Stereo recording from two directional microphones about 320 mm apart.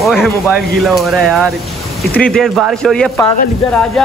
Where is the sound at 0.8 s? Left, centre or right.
Centre.